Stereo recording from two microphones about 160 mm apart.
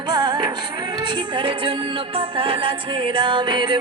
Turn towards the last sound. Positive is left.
turn(degrees=-30)  # may be behind; listen again after turning